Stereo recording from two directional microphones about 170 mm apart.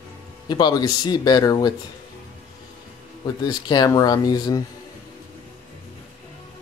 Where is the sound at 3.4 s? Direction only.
25° left (ahead or behind).